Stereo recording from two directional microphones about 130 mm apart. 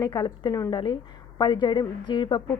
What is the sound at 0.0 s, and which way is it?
A woman's voice, 30° left (ahead or behind).